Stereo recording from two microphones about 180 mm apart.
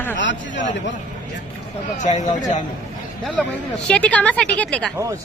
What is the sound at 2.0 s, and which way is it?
Speech, 40° left (ahead or behind).